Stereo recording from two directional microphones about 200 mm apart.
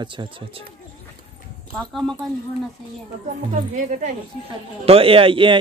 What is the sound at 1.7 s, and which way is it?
Speech, centre (ahead or behind).